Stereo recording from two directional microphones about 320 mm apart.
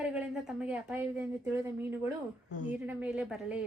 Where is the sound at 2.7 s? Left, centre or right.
Centre.